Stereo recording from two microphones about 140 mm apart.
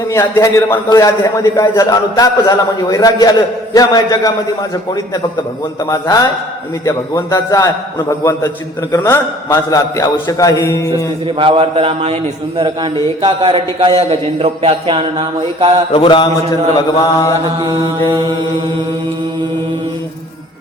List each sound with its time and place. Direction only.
0.1 s a man's voice: 20° left (ahead or behind)
5.9 s a man's voice: 25° left (ahead or behind)
11.3 s a man's voice: 40° right (ahead or behind)
15.9 s mantra: 40° left (ahead or behind)
16.7 s a man's voice: 25° left (ahead or behind)
17.7 s mantra: 30° right (ahead or behind)
18.1 s a man's voice: 30° right (ahead or behind)